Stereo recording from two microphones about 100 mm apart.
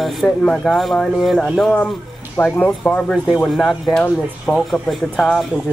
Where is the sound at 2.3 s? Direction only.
15° left (ahead or behind).